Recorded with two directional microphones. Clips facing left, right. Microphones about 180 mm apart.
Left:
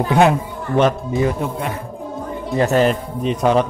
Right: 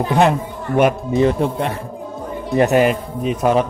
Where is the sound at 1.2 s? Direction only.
30° right (ahead or behind).